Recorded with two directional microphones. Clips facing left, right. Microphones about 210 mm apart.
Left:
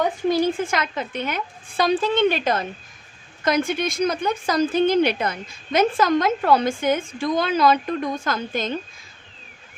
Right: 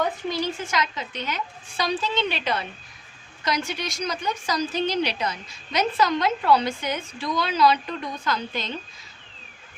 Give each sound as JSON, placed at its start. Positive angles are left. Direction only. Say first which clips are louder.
{"t": 0.3, "sound": "a woman's voice", "louder": "left 7 dB", "side_deg": 50}